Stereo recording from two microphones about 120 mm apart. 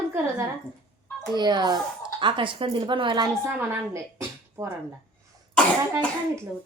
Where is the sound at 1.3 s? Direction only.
35° right (ahead or behind).